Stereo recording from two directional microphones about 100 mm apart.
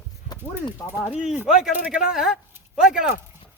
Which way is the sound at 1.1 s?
5° right (ahead or behind).